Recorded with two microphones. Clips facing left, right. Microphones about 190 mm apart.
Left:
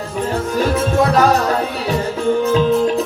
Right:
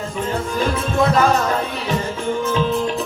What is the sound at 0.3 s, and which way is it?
Music, 40° left (ahead or behind).